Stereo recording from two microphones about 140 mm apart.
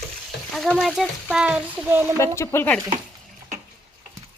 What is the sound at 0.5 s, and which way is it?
Speech, centre (ahead or behind).